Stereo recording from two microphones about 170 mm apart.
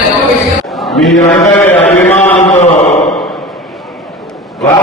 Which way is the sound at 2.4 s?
40° left (ahead or behind).